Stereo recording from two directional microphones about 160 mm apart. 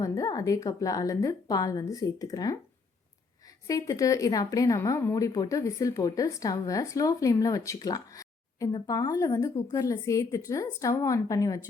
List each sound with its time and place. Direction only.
0.0 s speech: 20° left (ahead or behind)
3.7 s speech: 20° left (ahead or behind)